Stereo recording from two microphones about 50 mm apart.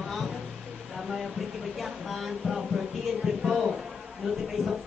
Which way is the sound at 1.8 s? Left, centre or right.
Centre.